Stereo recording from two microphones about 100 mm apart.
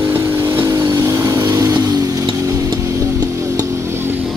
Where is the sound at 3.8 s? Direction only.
25° right (ahead or behind).